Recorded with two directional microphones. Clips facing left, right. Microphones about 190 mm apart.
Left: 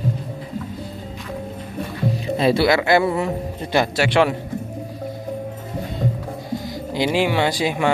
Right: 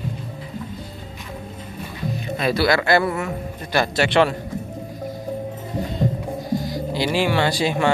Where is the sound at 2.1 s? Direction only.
30° left (ahead or behind).